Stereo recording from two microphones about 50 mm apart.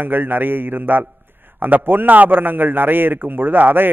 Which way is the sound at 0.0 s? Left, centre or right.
Right.